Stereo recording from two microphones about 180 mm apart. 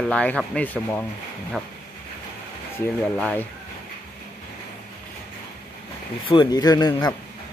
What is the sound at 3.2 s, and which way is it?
Speech, 5° left (ahead or behind).